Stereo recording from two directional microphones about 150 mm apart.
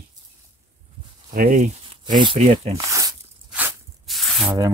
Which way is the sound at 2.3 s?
45° right (ahead or behind).